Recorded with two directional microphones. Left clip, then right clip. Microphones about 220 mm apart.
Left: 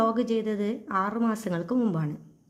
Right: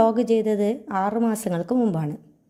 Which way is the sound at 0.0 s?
25° right (ahead or behind).